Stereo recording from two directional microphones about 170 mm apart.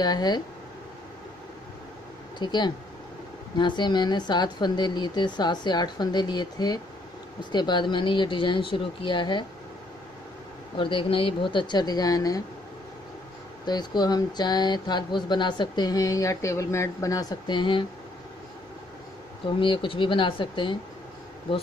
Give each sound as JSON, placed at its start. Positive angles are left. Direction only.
{"t": 0.0, "sound": "speech", "side_deg": 25}
{"t": 2.3, "sound": "speech", "side_deg": 25}
{"t": 10.8, "sound": "speech", "side_deg": 30}
{"t": 13.7, "sound": "speech", "side_deg": 25}
{"t": 19.4, "sound": "speech", "side_deg": 30}